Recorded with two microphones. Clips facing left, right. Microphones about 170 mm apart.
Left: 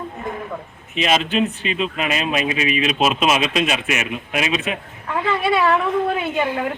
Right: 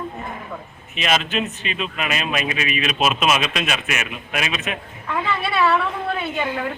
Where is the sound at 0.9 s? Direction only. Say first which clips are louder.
Left 3 dB; 30° left (ahead or behind).